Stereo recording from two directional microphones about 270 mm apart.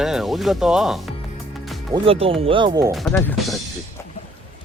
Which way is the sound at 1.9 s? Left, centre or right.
Right.